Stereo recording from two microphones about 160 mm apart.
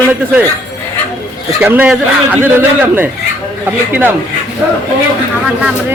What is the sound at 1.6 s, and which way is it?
A man's voice, 10° right (ahead or behind).